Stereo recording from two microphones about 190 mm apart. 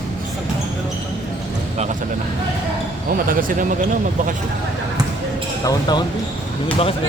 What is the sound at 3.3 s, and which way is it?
Speech, 45° right (ahead or behind).